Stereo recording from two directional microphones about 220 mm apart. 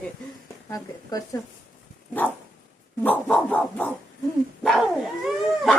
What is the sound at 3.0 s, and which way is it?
Dog, 10° left (ahead or behind).